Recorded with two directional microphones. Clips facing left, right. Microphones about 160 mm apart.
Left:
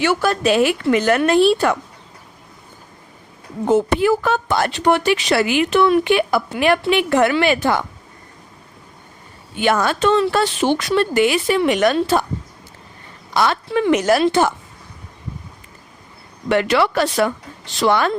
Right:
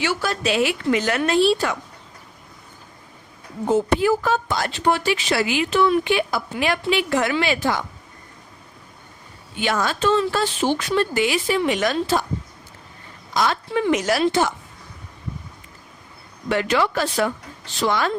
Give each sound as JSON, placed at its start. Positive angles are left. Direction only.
{"t": 0.0, "sound": "speech", "side_deg": 55}
{"t": 3.7, "sound": "speech", "side_deg": 70}
{"t": 9.6, "sound": "speech", "side_deg": 55}
{"t": 13.3, "sound": "speech", "side_deg": 65}
{"t": 16.5, "sound": "speech", "side_deg": 70}